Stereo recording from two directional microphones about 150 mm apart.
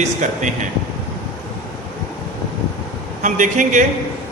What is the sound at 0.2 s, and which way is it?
Speech, 55° right (ahead or behind).